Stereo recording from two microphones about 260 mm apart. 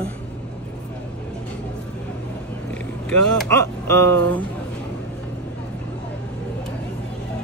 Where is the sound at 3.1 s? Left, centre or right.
Centre.